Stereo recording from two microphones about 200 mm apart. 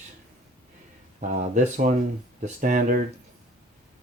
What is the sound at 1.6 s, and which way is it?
Speech, 40° right (ahead or behind).